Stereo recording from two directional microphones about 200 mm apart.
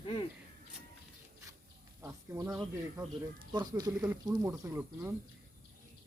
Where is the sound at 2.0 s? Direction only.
15° right (ahead or behind).